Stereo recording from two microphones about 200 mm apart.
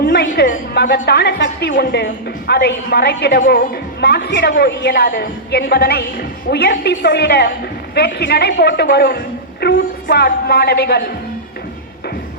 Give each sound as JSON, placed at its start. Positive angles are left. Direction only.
{"t": 0.0, "sound": "a woman's voice", "side_deg": 50}